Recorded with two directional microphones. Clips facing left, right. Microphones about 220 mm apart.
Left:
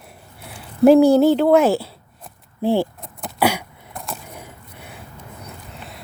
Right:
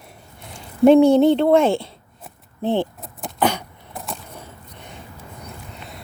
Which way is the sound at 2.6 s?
10° left (ahead or behind).